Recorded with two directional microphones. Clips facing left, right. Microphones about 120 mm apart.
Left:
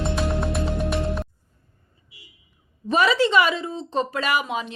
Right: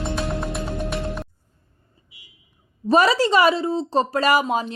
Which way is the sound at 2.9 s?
40° right (ahead or behind).